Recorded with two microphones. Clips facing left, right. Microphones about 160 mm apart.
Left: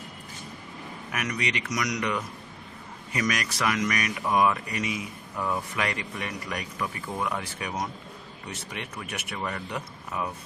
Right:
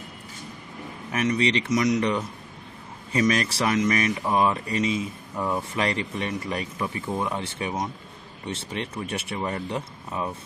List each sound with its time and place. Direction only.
1.1 s speech: 30° right (ahead or behind)